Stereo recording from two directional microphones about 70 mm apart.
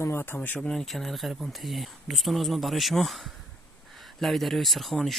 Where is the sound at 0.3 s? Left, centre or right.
Left.